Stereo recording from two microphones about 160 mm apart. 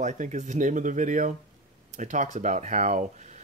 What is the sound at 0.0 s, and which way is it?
Speech, 50° right (ahead or behind).